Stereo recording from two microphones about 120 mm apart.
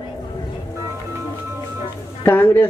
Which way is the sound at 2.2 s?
20° left (ahead or behind).